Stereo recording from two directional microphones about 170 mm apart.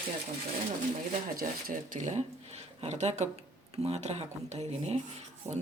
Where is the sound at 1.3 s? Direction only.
50° right (ahead or behind).